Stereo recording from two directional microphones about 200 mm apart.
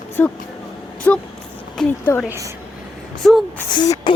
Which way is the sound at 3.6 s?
20° left (ahead or behind).